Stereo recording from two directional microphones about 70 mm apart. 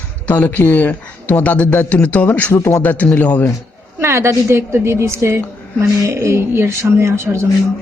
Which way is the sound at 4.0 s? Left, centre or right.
Right.